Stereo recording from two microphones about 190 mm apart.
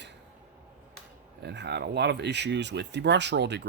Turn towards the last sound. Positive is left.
turn(degrees=-65)  # may be behind; listen again after turning